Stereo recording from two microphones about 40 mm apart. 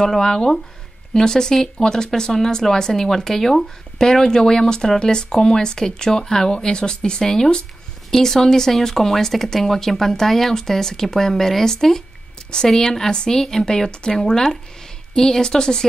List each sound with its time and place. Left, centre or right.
0.1 s speech: centre
13.1 s a woman's voice: left
13.4 s speech: centre